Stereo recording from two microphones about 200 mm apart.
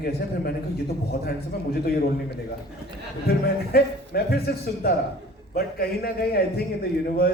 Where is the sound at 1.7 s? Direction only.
50° left (ahead or behind).